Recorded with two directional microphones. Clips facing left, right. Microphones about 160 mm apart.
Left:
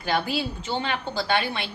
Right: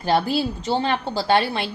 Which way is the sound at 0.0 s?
40° right (ahead or behind).